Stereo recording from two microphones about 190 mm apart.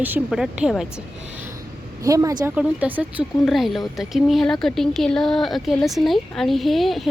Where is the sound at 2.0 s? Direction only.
15° right (ahead or behind).